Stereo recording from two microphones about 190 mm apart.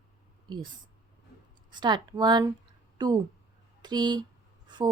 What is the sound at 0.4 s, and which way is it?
Speech, 25° right (ahead or behind).